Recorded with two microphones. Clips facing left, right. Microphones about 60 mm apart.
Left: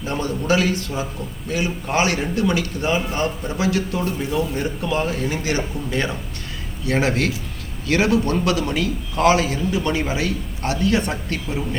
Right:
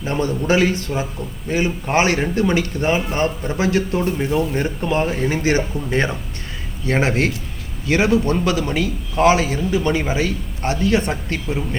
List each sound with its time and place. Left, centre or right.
0.0 s a man's voice: right